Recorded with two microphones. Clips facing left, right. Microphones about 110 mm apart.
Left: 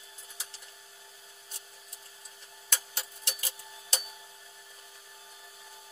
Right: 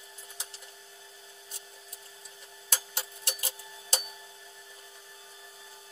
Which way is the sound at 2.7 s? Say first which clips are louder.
Right 1 dB; 30° right (ahead or behind).